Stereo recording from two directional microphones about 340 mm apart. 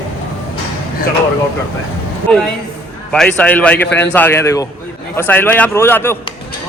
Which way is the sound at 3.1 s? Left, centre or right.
Centre.